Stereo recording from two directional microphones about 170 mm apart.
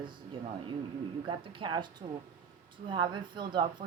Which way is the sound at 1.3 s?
30° right (ahead or behind).